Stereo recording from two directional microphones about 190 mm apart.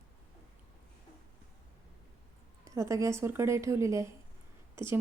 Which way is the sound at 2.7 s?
15° right (ahead or behind).